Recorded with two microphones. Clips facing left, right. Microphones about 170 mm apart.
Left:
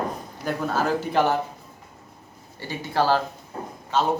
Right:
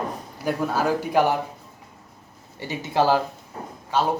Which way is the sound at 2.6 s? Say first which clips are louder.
Right 2 dB; 20° right (ahead or behind).